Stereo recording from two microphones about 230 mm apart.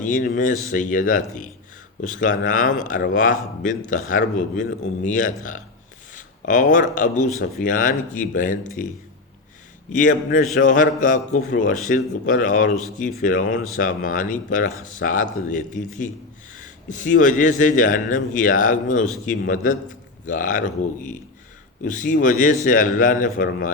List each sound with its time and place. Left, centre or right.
0.0 s a man's voice: left
9.9 s a man's voice: left